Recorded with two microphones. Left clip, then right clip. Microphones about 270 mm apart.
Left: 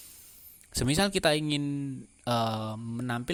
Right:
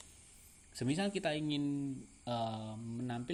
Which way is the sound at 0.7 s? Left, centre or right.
Left.